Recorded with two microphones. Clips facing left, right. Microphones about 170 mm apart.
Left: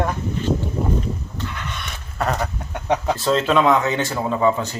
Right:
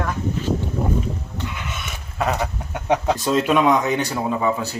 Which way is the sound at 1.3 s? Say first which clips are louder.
Even; 10° right (ahead or behind).